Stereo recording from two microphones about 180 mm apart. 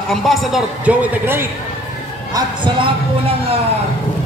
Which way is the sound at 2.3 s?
25° right (ahead or behind).